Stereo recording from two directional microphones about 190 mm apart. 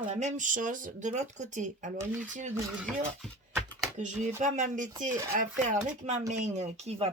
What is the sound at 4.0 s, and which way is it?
Speech, 40° right (ahead or behind).